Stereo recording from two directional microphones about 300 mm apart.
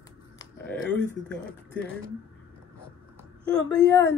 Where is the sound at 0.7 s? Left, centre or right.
Centre.